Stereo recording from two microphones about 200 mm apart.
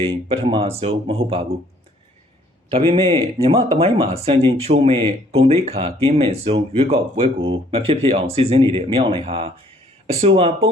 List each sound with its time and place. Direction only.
0.0 s speech: 25° right (ahead or behind)
2.7 s speech: 30° right (ahead or behind)